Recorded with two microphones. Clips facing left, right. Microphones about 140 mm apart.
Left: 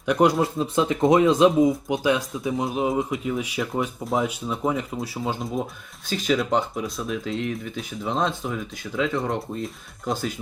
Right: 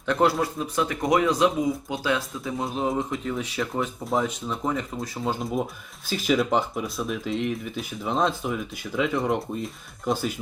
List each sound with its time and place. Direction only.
0.0 s speech: 15° left (ahead or behind); by 10.3 s 5° right (ahead or behind)